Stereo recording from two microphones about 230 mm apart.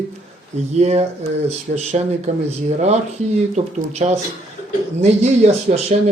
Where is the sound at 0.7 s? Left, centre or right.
Right.